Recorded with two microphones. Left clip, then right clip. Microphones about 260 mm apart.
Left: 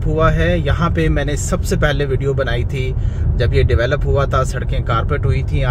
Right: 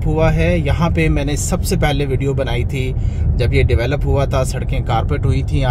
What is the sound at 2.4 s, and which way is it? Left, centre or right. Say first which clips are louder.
Speech: left 1 dB; centre.